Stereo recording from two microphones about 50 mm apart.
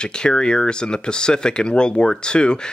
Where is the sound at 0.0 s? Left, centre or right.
Centre.